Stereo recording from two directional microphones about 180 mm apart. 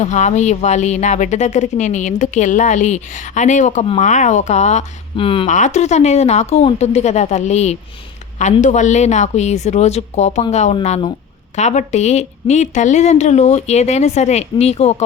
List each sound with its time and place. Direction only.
0.0 s a woman's voice: 40° left (ahead or behind)
5.5 s a woman's voice: 40° left (ahead or behind)